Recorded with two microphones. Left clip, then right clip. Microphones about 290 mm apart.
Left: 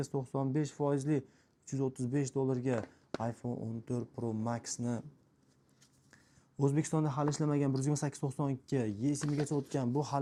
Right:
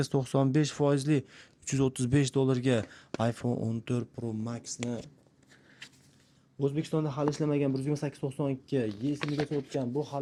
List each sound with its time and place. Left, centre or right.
0.0 s speech: centre
4.6 s speech: left
6.6 s speech: left
9.7 s speech: left